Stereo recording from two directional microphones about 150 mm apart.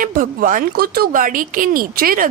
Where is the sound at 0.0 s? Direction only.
65° right (ahead or behind).